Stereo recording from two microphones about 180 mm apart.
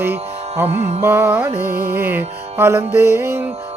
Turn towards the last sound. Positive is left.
turn(degrees=-15)  # may be behind; listen again after turning